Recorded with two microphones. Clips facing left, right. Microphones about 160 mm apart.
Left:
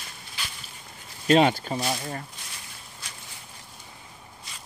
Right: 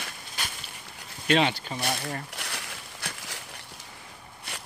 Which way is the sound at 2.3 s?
75° right (ahead or behind).